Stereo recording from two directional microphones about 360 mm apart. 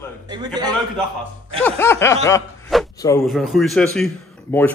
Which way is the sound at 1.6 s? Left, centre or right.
Centre.